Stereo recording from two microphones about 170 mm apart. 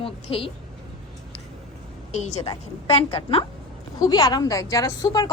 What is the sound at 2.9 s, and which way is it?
Speech, 35° left (ahead or behind).